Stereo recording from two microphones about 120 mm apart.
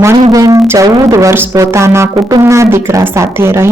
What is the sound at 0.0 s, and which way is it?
A woman's voice, 30° right (ahead or behind).